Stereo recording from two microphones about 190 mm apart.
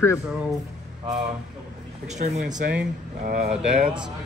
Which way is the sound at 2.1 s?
40° right (ahead or behind).